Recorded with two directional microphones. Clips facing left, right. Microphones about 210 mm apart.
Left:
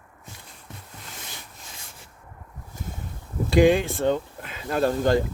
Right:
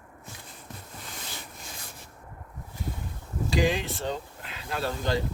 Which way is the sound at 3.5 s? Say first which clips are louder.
Left 8 dB; 55° left (ahead or behind).